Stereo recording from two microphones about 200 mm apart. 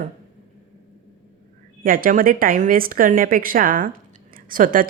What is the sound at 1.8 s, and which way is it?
A woman's voice, 45° right (ahead or behind).